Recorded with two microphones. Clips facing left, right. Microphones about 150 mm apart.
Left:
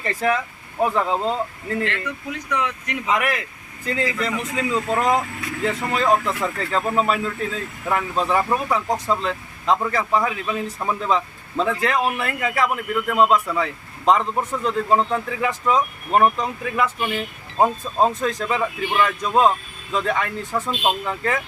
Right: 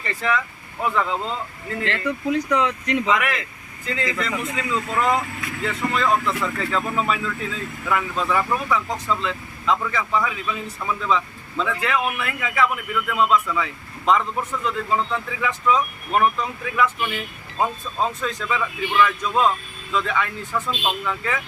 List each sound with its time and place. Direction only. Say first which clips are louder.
0.0 s speech: left 2 dB; 40° left (ahead or behind)
1.8 s speech: right 2 dB; 30° right (ahead or behind)
3.8 s speech: left 2 dB; 40° left (ahead or behind)